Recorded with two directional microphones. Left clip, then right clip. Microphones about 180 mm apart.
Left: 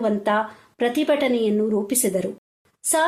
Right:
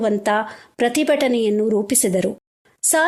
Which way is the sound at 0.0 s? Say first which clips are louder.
Right 2 dB; 40° right (ahead or behind).